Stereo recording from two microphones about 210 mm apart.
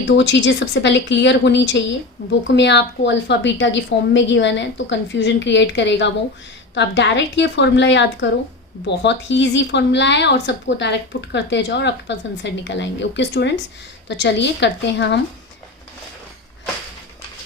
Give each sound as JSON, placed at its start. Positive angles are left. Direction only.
{"t": 0.2, "sound": "a woman's voice", "side_deg": 60}